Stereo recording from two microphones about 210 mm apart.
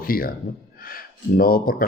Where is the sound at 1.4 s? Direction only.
45° left (ahead or behind).